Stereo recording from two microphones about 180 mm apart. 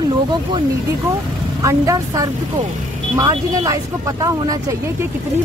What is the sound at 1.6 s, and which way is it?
Speech, 20° right (ahead or behind).